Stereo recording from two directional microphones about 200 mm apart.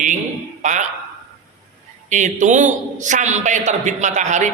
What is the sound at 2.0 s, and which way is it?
A man's voice, 40° right (ahead or behind).